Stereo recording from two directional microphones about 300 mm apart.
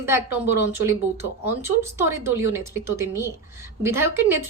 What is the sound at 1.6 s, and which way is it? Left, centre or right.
Speech, centre.